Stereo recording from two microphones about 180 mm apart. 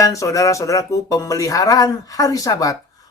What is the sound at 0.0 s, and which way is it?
Speech, 20° left (ahead or behind).